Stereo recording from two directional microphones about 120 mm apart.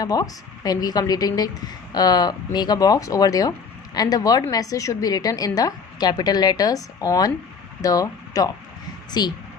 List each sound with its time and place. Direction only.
0.0 s a woman's voice: 30° left (ahead or behind)